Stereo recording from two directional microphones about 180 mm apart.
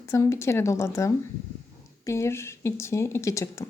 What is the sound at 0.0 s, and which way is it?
Speech, 15° left (ahead or behind).